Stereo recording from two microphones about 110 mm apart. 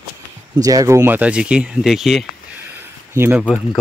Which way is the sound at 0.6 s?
35° right (ahead or behind).